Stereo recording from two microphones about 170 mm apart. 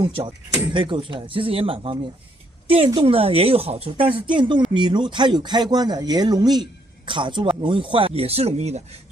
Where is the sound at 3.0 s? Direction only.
35° right (ahead or behind).